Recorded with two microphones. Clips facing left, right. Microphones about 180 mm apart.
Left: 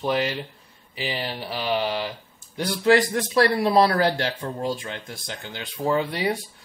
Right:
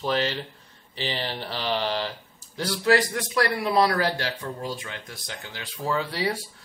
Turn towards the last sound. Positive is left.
turn(degrees=20)  # may be behind; listen again after turning